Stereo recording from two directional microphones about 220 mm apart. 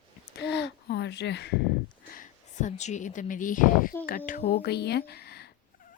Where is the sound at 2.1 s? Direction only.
35° left (ahead or behind).